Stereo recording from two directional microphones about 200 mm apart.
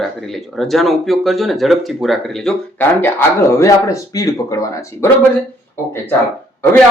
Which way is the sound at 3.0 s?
10° left (ahead or behind).